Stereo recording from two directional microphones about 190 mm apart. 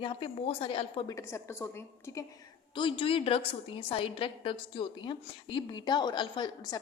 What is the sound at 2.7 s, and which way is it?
A woman's voice, 25° left (ahead or behind).